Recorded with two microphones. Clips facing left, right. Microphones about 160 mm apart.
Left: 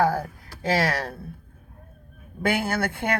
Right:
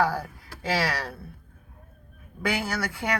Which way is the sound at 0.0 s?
50° left (ahead or behind).